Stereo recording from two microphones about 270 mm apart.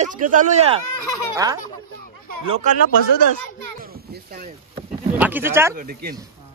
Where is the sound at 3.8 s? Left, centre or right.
Right.